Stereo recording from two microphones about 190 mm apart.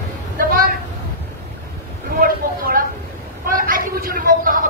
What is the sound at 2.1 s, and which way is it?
Vehicle, 50° right (ahead or behind).